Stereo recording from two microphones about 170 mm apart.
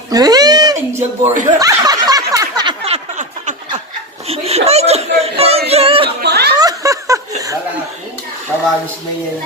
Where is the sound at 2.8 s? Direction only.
40° right (ahead or behind).